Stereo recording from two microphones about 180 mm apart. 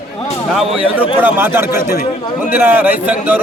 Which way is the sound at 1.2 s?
10° right (ahead or behind).